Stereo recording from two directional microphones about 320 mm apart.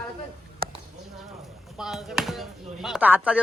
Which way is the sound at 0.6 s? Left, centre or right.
Right.